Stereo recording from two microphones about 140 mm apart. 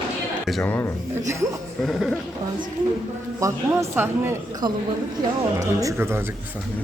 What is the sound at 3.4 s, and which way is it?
Speech, 20° right (ahead or behind).